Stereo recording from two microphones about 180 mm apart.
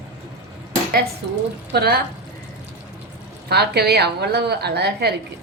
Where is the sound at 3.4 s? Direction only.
65° right (ahead or behind).